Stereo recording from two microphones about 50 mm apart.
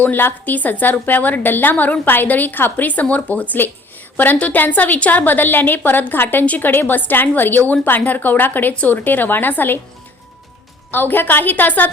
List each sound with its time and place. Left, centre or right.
0.0 s a woman's voice: left
10.9 s a woman's voice: left